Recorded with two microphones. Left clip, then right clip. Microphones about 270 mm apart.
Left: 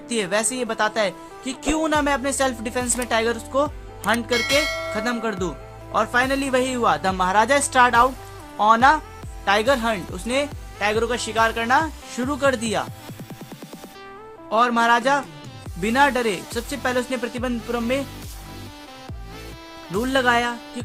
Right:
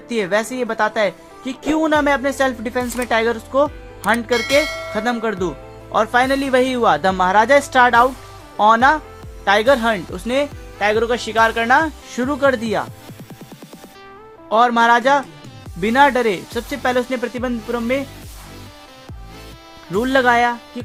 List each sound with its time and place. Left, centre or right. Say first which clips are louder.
0.1 s speech: right 4 dB; right
4.3 s speech: right 3 dB; centre
4.9 s speech: right 4 dB; right
14.5 s speech: right 5 dB; right
19.9 s speech: right 5 dB; right